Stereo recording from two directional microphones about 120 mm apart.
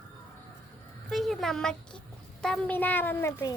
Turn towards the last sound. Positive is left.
turn(degrees=20)  # may be behind; listen again after turning